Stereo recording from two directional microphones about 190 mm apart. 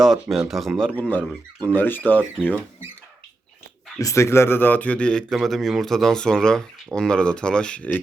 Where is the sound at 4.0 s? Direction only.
15° left (ahead or behind).